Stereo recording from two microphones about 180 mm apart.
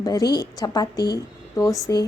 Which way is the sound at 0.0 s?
20° left (ahead or behind).